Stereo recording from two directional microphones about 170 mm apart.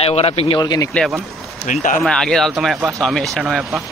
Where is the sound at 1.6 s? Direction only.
50° left (ahead or behind).